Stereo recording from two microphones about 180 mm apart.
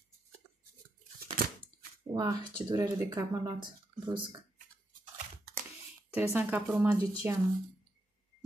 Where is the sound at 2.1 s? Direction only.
25° right (ahead or behind).